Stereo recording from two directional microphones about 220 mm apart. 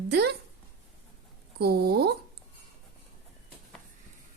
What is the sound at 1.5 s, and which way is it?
Speech, 45° right (ahead or behind).